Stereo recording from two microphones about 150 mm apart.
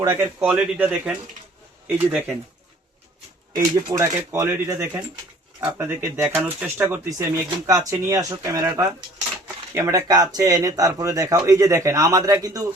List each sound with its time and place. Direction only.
0.0 s speech: 15° right (ahead or behind)
3.9 s speech: 15° right (ahead or behind)